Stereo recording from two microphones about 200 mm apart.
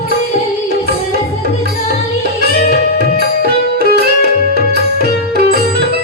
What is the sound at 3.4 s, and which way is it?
Music, 50° right (ahead or behind).